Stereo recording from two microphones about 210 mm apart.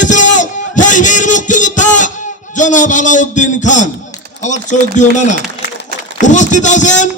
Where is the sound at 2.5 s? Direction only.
35° left (ahead or behind).